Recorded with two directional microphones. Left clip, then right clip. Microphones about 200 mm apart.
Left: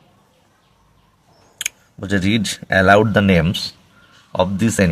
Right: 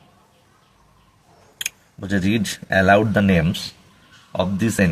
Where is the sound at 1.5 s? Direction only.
25° left (ahead or behind).